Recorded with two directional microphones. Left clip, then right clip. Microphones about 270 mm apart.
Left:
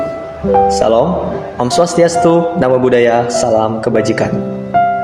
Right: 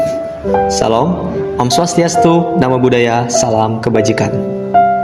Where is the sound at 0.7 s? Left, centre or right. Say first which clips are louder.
Left 2 dB; right.